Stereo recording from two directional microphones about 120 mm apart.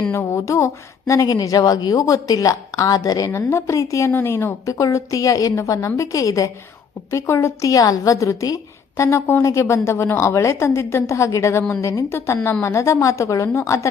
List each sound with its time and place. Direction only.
0.1 s speech: 20° left (ahead or behind)